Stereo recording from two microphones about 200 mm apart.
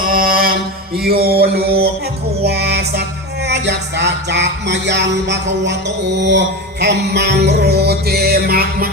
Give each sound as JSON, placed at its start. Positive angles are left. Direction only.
{"t": 0.0, "sound": "mantra", "side_deg": -45}
{"t": 2.4, "sound": "music", "side_deg": -55}